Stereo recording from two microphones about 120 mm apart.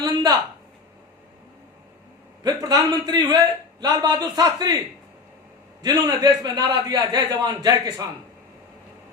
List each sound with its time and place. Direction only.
0.0 s a sound: 35° right (ahead or behind)
2.4 s a man's voice: 35° right (ahead or behind)
5.8 s a man's voice: 35° right (ahead or behind)